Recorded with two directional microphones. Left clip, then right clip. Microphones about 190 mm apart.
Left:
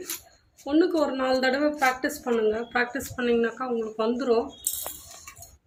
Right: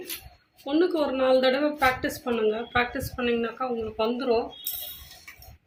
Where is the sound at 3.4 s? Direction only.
20° left (ahead or behind).